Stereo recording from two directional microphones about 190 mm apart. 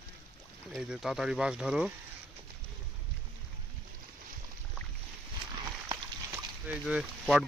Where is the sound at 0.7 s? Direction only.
Centre (ahead or behind).